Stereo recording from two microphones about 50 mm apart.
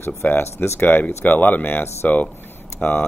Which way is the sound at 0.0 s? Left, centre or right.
Left.